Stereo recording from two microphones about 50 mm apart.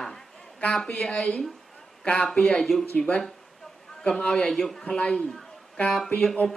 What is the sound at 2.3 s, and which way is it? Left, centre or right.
Speech, centre.